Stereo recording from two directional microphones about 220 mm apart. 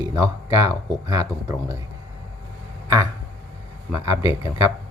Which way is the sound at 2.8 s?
15° right (ahead or behind).